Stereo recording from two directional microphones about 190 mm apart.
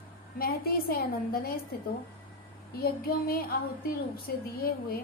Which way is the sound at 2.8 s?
55° left (ahead or behind).